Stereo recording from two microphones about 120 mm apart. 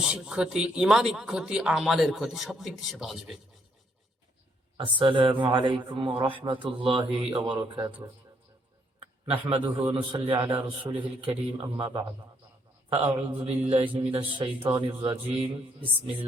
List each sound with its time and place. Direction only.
0.0 s a man's voice: 10° right (ahead or behind)
4.8 s a man's voice: 45° right (ahead or behind)
9.2 s a man's voice: 45° right (ahead or behind)
12.9 s a man's voice: 50° right (ahead or behind)